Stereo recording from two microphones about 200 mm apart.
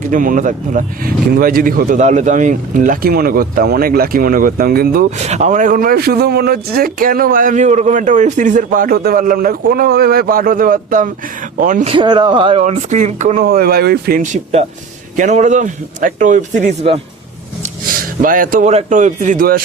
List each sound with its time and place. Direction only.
0.1 s speech: 40° right (ahead or behind)
5.1 s speech: 35° right (ahead or behind)
11.9 s speech: 20° right (ahead or behind)
12.6 s speech: 35° right (ahead or behind)
15.1 s speech: 40° right (ahead or behind)